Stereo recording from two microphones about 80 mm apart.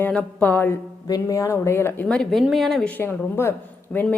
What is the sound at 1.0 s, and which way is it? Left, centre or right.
A woman's voice, left.